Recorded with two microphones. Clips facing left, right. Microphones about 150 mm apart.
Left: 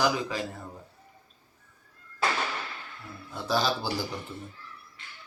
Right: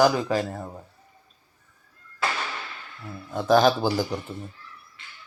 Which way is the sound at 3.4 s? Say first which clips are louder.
Right 9 dB; 50° right (ahead or behind).